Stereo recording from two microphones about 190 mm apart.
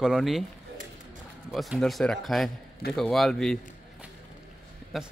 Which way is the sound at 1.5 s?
Centre (ahead or behind).